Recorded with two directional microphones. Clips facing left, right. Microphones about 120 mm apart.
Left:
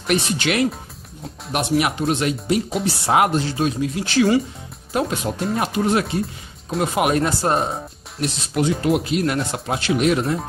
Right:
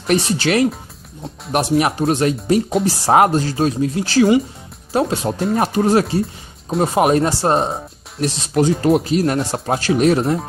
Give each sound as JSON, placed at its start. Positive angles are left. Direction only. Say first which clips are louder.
{"t": 0.0, "sound": "speech", "louder": "right 4 dB", "side_deg": -35}